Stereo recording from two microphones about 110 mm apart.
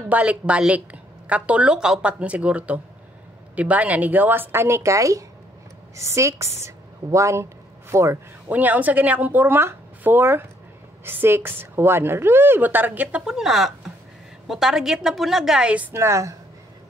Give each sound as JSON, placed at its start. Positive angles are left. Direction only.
{"t": 0.1, "sound": "a woman's voice", "side_deg": -10}
{"t": 8.5, "sound": "a woman's voice", "side_deg": -15}
{"t": 15.9, "sound": "a woman's voice", "side_deg": -25}